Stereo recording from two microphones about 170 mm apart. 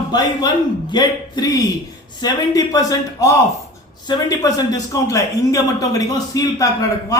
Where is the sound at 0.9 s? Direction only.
25° left (ahead or behind).